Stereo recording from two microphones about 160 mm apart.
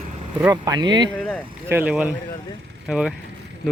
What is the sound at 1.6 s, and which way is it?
Speech, 10° right (ahead or behind).